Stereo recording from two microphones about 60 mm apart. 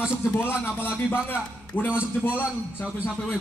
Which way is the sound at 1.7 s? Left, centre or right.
Left.